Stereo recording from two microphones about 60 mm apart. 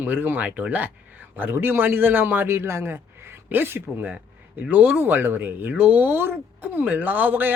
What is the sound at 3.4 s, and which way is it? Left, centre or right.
Speech, right.